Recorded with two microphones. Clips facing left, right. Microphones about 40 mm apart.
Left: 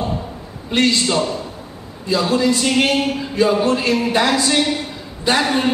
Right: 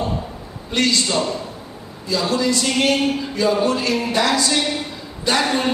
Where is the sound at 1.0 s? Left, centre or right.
Centre.